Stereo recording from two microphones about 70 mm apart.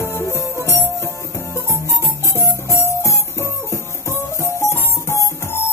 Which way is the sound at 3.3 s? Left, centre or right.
Left.